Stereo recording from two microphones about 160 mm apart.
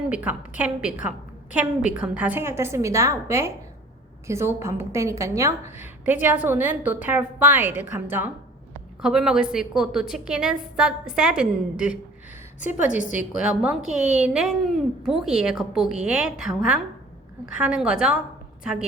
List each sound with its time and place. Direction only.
0.1 s a woman's voice: 10° right (ahead or behind)
12.5 s a woman's voice: 50° left (ahead or behind)
13.4 s a woman's voice: 5° right (ahead or behind)
17.6 s a woman's voice: 5° right (ahead or behind)